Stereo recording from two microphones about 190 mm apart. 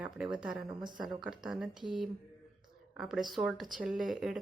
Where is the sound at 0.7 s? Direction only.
25° right (ahead or behind).